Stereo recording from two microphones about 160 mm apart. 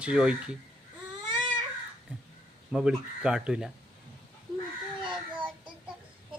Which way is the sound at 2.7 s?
5° right (ahead or behind).